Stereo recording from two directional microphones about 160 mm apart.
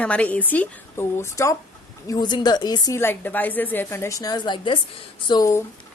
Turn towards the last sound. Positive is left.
turn(degrees=20)  # may be behind; listen again after turning